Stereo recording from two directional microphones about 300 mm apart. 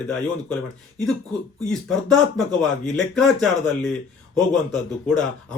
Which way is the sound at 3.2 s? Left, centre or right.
Centre.